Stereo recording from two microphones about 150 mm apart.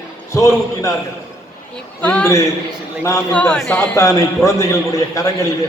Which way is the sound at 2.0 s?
5° left (ahead or behind).